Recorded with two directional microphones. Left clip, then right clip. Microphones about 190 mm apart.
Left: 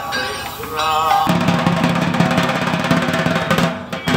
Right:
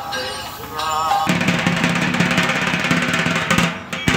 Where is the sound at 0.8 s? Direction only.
5° left (ahead or behind).